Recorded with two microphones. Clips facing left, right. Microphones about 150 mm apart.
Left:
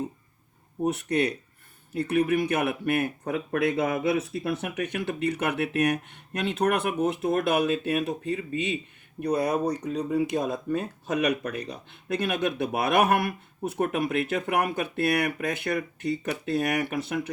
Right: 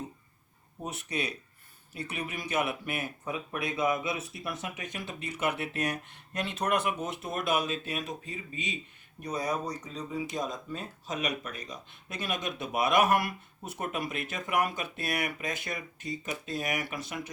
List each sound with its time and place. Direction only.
0.9 s speech: 60° left (ahead or behind)